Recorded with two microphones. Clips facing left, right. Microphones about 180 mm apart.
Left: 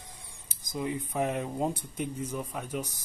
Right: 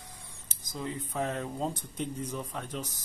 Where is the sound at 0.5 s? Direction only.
15° left (ahead or behind).